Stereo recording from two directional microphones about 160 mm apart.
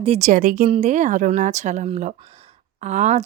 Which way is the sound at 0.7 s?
45° right (ahead or behind).